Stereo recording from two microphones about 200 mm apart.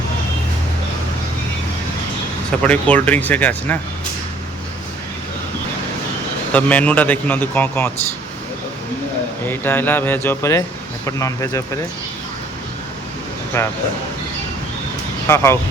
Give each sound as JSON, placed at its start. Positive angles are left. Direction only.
{"t": 2.6, "sound": "a man's voice", "side_deg": 5}
{"t": 6.5, "sound": "a man's voice", "side_deg": 5}
{"t": 9.5, "sound": "a man's voice", "side_deg": 10}
{"t": 13.5, "sound": "a man's voice", "side_deg": 10}
{"t": 15.3, "sound": "a man's voice", "side_deg": 15}